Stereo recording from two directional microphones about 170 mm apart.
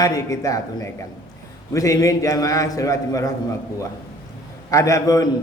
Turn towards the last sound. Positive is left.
turn(degrees=20)  # may be behind; listen again after turning